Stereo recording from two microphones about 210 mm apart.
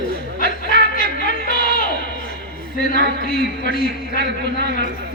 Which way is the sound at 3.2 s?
45° left (ahead or behind).